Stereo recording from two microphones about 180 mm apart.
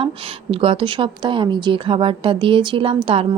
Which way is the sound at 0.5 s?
30° right (ahead or behind).